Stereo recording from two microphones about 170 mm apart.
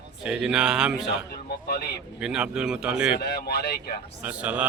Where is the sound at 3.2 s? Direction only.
70° left (ahead or behind).